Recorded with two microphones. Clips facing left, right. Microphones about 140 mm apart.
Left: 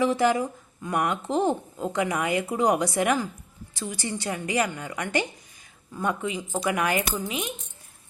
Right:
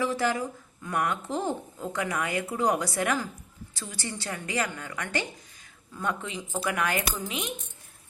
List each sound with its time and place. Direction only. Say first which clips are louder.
0.0 s a woman's voice: left 5 dB; 20° left (ahead or behind); by 7.5 s centre (ahead or behind)